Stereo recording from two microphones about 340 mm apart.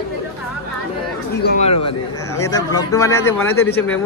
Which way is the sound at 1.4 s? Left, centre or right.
Centre.